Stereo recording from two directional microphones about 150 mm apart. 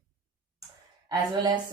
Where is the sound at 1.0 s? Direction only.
30° right (ahead or behind).